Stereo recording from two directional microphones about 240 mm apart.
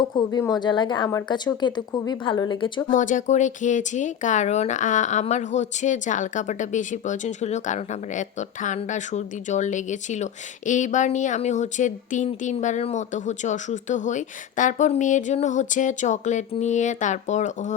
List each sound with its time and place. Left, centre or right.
0.2 s a woman's voice: centre
2.9 s speech: left